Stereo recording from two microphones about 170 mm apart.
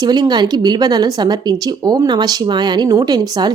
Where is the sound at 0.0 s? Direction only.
25° right (ahead or behind).